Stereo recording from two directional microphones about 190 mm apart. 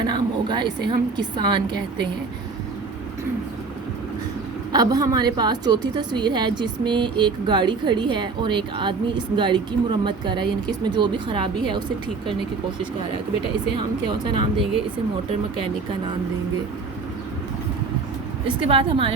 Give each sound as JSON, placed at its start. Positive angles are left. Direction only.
{"t": 0.0, "sound": "a woman's voice", "side_deg": -25}
{"t": 4.7, "sound": "a woman's voice", "side_deg": -20}
{"t": 13.7, "sound": "a woman's voice", "side_deg": -25}
{"t": 18.4, "sound": "a woman's voice", "side_deg": -30}